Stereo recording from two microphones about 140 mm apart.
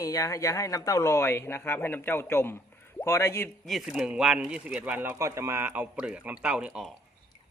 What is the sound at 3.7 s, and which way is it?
Speech, centre (ahead or behind).